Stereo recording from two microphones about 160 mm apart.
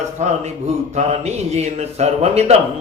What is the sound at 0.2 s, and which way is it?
A man's voice, 45° right (ahead or behind).